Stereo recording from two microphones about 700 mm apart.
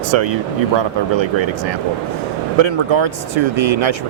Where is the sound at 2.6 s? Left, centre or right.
Right.